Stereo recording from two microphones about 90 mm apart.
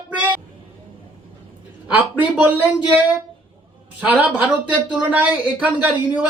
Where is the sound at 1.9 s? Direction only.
20° right (ahead or behind).